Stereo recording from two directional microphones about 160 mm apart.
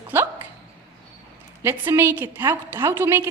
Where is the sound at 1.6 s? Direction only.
15° right (ahead or behind).